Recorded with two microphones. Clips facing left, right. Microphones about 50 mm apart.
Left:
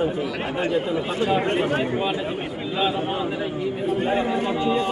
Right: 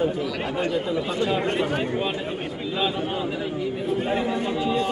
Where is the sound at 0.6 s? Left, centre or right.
Left.